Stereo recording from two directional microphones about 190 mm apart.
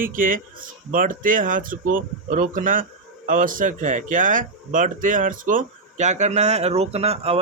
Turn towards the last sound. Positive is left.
turn(degrees=-35)  # may be behind; listen again after turning